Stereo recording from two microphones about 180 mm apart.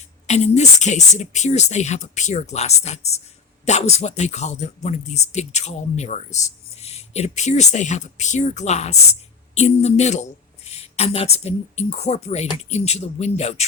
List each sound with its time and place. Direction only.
0.3 s speech: 40° left (ahead or behind)